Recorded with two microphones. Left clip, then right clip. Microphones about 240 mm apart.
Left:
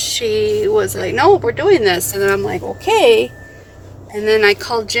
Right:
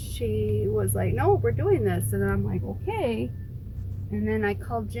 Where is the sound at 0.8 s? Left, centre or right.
Centre.